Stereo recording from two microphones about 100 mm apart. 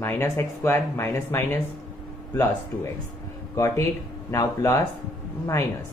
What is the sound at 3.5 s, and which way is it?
Speech, 30° left (ahead or behind).